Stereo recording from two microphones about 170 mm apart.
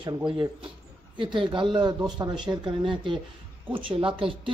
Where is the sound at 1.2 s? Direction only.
30° right (ahead or behind).